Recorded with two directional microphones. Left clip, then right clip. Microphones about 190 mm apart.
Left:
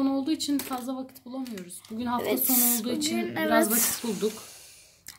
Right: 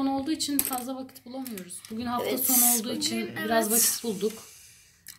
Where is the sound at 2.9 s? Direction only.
20° left (ahead or behind).